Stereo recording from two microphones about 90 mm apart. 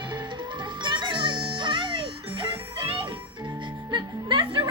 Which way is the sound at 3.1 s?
60° right (ahead or behind).